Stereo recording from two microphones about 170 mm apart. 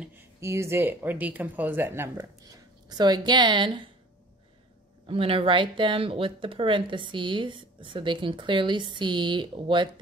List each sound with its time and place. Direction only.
0.0 s speech: 15° right (ahead or behind); by 3.9 s 30° right (ahead or behind)
5.0 s speech: 35° right (ahead or behind)